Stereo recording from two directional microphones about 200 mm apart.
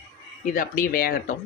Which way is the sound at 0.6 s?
45° left (ahead or behind).